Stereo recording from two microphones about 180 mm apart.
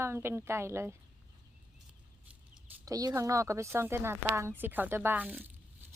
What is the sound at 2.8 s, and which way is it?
A woman's voice, 20° right (ahead or behind).